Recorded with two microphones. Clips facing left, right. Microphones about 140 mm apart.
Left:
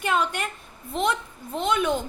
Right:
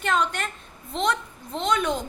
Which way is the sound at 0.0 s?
10° left (ahead or behind).